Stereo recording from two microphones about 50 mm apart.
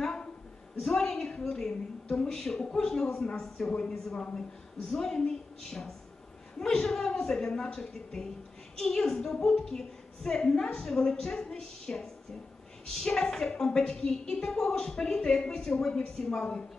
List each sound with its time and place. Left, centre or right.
0.0 s a sound: centre
0.8 s a woman's voice: centre
4.2 s a woman's voice: centre